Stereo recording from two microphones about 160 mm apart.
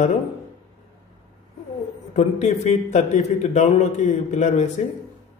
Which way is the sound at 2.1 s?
45° left (ahead or behind).